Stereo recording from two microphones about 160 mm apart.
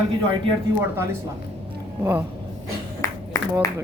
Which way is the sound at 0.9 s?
15° right (ahead or behind).